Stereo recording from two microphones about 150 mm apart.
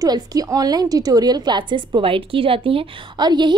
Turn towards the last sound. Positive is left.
turn(degrees=-30)  # may be behind; listen again after turning